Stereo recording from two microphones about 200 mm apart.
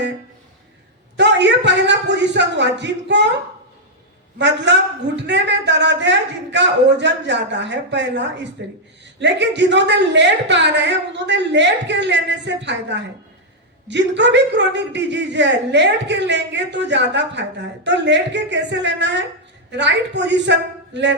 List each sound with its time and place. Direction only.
1.1 s a man's voice: 60° right (ahead or behind)
4.4 s a man's voice: 60° right (ahead or behind)